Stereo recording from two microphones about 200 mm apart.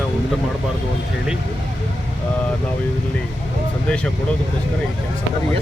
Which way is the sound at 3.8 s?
5° left (ahead or behind).